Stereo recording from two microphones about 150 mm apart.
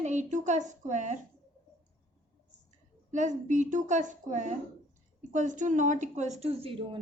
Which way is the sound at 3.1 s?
55° right (ahead or behind).